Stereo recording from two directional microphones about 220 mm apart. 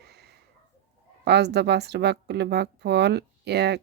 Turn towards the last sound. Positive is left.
turn(degrees=-50)  # may be behind; listen again after turning